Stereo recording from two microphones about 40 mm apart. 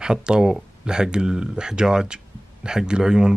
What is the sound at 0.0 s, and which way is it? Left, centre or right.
Speech, right.